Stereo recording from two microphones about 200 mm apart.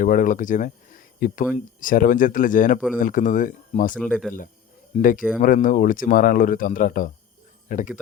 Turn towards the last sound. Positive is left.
turn(degrees=40)  # may be behind; listen again after turning